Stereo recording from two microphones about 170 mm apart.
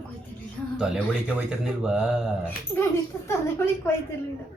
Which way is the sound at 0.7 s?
5° right (ahead or behind).